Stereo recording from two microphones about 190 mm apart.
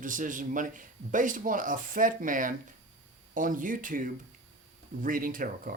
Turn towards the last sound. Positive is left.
turn(degrees=-45)  # may be behind; listen again after turning